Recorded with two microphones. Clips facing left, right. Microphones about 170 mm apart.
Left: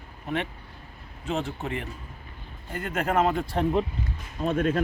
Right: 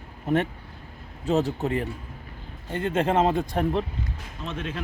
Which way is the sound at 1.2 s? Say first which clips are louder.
Right 6 dB; 40° right (ahead or behind).